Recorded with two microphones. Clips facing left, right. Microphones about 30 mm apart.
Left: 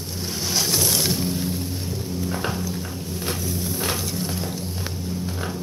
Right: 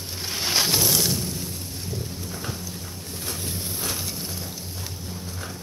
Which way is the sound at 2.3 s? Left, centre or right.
Left.